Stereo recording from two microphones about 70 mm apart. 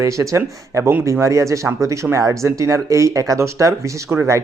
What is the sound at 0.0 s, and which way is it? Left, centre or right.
Speech, right.